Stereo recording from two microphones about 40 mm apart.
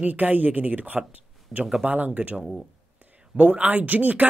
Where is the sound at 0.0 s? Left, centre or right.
Right.